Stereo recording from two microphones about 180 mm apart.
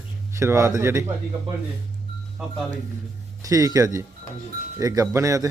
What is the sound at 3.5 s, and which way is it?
Speech, 20° right (ahead or behind).